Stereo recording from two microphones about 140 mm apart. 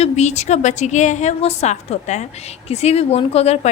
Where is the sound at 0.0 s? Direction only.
55° left (ahead or behind).